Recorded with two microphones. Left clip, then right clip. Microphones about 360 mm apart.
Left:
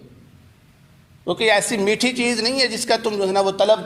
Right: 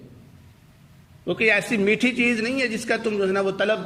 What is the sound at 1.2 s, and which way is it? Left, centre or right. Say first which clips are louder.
A man's voice: left 3 dB; centre.